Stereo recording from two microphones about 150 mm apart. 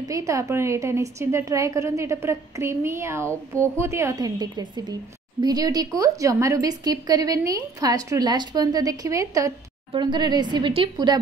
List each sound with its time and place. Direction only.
0.1 s a woman's voice: 20° right (ahead or behind)